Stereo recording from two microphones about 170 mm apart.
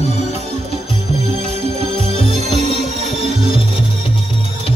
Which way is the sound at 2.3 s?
40° right (ahead or behind).